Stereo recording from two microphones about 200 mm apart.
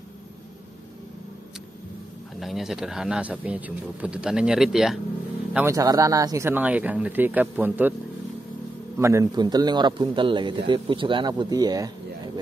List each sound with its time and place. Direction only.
2.4 s speech: centre (ahead or behind)
8.9 s a man's voice: 15° right (ahead or behind)